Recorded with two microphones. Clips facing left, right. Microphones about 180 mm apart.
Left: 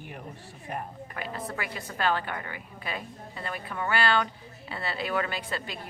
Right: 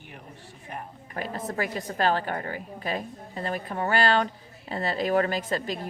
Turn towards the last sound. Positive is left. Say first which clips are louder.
# right 6 dB
turn(degrees=-40)  # may be behind; listen again after turning